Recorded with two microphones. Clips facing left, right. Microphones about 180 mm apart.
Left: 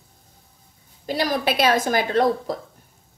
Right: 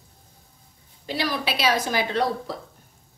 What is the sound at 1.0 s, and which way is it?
A woman's voice, 45° left (ahead or behind).